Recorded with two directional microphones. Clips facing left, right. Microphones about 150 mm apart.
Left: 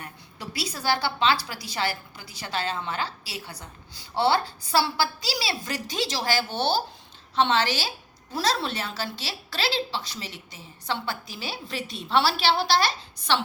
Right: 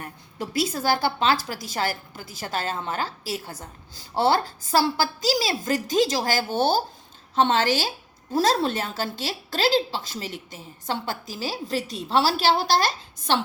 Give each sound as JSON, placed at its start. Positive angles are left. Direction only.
{"t": 0.0, "sound": "a woman's voice", "side_deg": -45}